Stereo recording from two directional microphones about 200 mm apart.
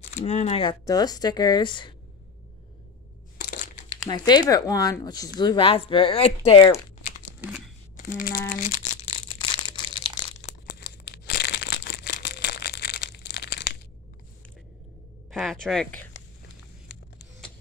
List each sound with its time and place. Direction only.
0.1 s speech: 35° left (ahead or behind)
3.3 s crushing: 55° left (ahead or behind)
4.1 s speech: 20° left (ahead or behind)
8.1 s crumpling: 45° left (ahead or behind); by 10.5 s 30° left (ahead or behind)
10.8 s a sound: 55° left (ahead or behind)
15.3 s speech: 5° left (ahead or behind)